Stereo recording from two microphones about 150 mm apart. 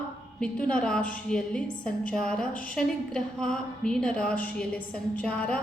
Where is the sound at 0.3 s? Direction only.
5° left (ahead or behind).